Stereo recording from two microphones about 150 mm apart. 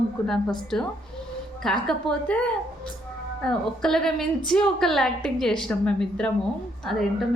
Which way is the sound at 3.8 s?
5° left (ahead or behind).